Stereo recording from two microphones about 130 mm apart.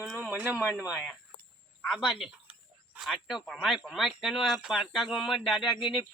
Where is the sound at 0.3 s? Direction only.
15° right (ahead or behind).